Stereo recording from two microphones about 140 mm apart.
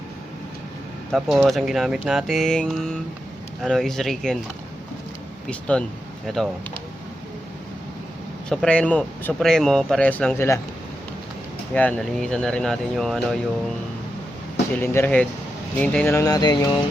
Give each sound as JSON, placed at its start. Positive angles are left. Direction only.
{"t": 1.1, "sound": "speech", "side_deg": 0}
{"t": 5.5, "sound": "speech", "side_deg": 10}
{"t": 8.4, "sound": "speech", "side_deg": 10}
{"t": 11.7, "sound": "speech", "side_deg": 10}
{"t": 14.8, "sound": "speech", "side_deg": 15}
{"t": 16.1, "sound": "a sound", "side_deg": 25}